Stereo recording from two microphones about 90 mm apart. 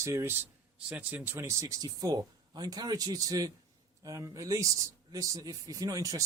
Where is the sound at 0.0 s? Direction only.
35° right (ahead or behind).